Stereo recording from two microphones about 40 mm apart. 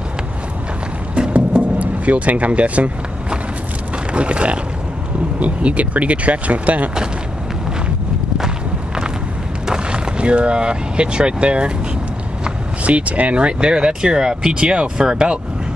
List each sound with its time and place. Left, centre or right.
1.3 s vehicle: right
4.1 s speech: right
9.7 s speech: right
12.8 s speech: right; by 15.3 s centre